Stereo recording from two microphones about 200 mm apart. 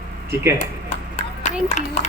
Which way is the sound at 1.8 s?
35° left (ahead or behind).